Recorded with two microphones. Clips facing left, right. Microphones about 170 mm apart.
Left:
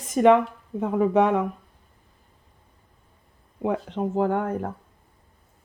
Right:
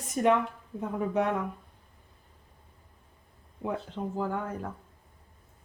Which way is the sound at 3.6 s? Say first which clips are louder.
Left 7 dB; 75° left (ahead or behind).